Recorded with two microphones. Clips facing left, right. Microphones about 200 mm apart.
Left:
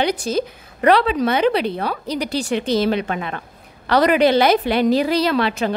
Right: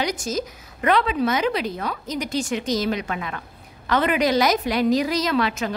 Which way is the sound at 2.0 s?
70° left (ahead or behind).